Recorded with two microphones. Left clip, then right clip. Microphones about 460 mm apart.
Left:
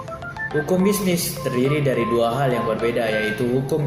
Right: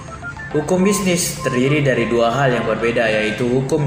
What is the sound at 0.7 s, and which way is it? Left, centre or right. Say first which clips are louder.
Speech: right 4 dB; left.